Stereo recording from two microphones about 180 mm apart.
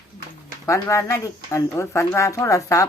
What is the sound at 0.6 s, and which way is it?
A woman's voice, 15° left (ahead or behind).